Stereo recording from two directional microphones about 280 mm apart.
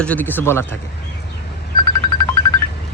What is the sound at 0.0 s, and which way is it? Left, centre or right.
Speech, centre.